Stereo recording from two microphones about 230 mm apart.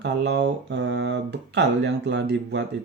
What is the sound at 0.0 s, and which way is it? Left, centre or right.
Speech, right.